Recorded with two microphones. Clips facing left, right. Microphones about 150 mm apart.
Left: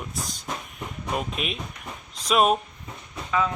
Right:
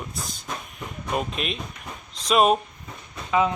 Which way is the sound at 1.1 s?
5° left (ahead or behind).